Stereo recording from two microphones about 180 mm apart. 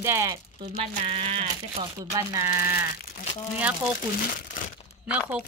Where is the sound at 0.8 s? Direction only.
30° right (ahead or behind); by 3.9 s 5° right (ahead or behind).